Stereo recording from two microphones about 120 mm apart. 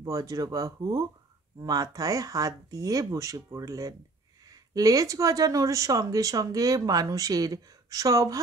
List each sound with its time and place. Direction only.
0.0 s speech: 30° right (ahead or behind)